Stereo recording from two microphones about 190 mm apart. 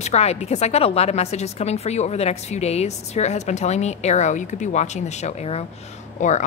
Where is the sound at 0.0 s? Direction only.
35° left (ahead or behind).